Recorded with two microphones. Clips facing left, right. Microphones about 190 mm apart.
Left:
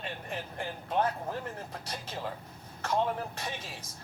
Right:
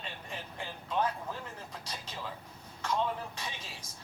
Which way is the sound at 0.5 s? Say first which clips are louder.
Left 3 dB; 55° left (ahead or behind).